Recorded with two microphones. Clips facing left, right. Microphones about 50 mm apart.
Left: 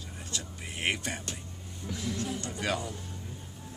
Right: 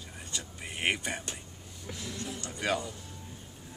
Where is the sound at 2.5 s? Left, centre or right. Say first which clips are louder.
Right 3 dB; centre.